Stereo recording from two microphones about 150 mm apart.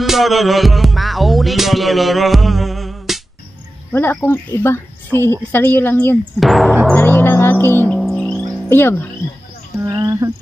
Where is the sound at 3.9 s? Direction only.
15° left (ahead or behind).